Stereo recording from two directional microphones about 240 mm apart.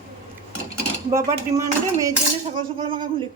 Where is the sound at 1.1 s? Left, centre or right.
Centre.